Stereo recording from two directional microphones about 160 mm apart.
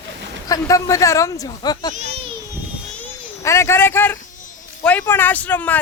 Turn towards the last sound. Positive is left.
turn(degrees=10)  # may be behind; listen again after turning